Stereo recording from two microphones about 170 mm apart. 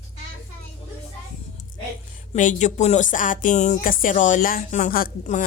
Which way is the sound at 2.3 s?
45° left (ahead or behind).